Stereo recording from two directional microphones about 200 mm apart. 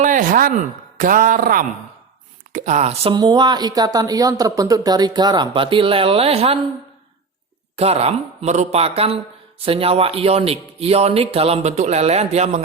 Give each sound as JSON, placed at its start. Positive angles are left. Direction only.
{"t": 0.0, "sound": "a sound", "side_deg": -40}
{"t": 0.9, "sound": "speech", "side_deg": -40}
{"t": 7.8, "sound": "a man's voice", "side_deg": -30}